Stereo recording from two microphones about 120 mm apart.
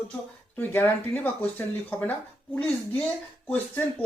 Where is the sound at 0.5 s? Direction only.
20° left (ahead or behind).